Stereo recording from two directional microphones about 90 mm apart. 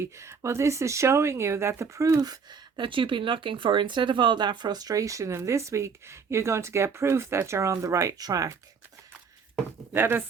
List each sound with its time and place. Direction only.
0.0 s speech: 30° right (ahead or behind)
9.9 s speech: 25° right (ahead or behind)